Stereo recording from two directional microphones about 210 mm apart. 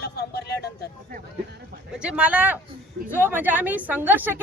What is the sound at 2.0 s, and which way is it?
Speech, 5° right (ahead or behind).